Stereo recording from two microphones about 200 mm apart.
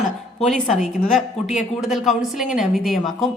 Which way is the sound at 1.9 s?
Centre (ahead or behind).